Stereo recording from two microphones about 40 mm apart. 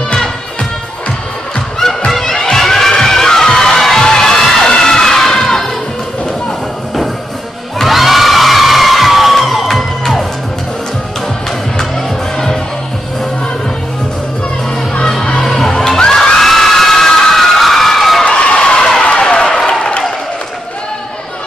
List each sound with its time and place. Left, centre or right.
0.1 s music: left
2.0 s music: centre
2.5 s children shouting: centre
7.8 s crowd: centre
15.0 s music: centre
15.4 s children shouting: centre
16.0 s crowd: centre
18.4 s a sound: left